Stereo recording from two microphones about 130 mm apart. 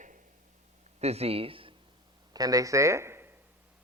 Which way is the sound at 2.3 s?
30° right (ahead or behind).